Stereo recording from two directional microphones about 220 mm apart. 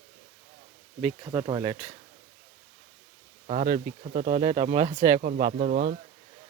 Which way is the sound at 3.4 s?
35° right (ahead or behind).